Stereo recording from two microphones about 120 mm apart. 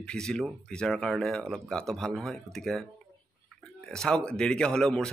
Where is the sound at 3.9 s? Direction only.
5° left (ahead or behind).